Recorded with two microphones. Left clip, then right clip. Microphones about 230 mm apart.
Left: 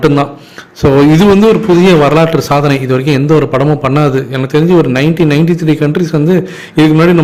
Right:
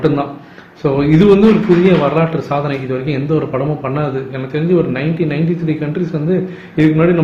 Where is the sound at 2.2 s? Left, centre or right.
Left.